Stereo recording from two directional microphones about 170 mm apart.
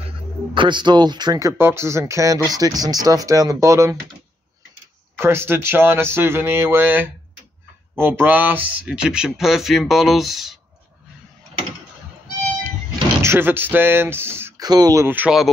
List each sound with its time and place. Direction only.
0.6 s speech: 25° right (ahead or behind)
5.1 s speech: 15° right (ahead or behind)
13.2 s speech: 15° right (ahead or behind)